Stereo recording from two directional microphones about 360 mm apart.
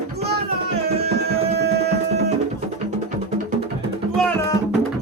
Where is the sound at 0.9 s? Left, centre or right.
Right.